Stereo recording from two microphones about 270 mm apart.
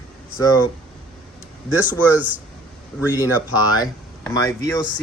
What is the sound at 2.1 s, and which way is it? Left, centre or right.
Speech, centre.